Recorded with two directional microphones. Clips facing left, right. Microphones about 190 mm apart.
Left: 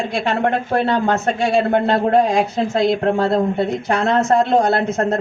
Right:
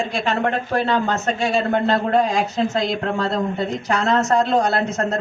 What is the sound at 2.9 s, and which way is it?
Speech, 55° left (ahead or behind).